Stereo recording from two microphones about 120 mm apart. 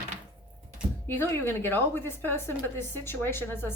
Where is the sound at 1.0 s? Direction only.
20° left (ahead or behind).